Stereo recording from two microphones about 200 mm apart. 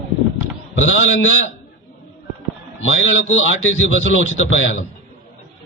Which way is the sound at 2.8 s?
75° left (ahead or behind).